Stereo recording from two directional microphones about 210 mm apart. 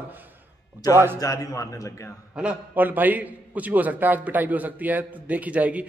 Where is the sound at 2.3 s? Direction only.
5° right (ahead or behind).